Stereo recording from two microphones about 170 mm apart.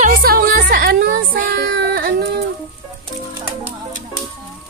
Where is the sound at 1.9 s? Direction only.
65° right (ahead or behind).